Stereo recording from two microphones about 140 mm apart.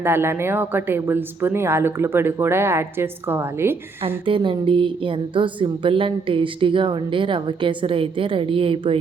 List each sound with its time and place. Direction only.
0.0 s a woman's voice: 15° right (ahead or behind)
4.3 s music: 40° right (ahead or behind)